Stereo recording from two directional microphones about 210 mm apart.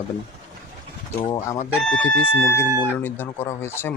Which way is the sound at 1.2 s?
25° left (ahead or behind).